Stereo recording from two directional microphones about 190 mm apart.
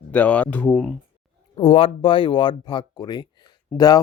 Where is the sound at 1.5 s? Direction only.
30° left (ahead or behind).